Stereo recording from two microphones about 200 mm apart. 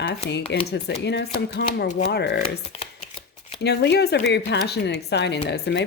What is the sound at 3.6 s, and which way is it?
Speech, 55° left (ahead or behind).